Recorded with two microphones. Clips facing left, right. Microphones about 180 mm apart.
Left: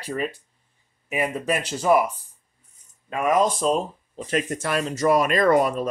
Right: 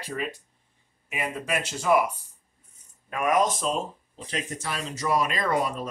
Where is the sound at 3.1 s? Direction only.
30° left (ahead or behind).